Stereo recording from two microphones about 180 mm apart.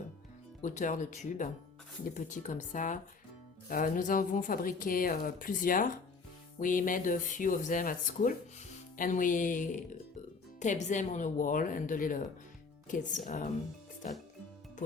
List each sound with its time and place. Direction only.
0.6 s speech: 45° left (ahead or behind)